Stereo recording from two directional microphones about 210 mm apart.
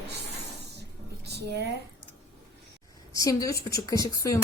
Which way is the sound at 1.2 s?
50° right (ahead or behind).